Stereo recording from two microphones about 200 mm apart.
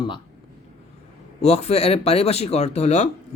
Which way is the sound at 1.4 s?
30° left (ahead or behind).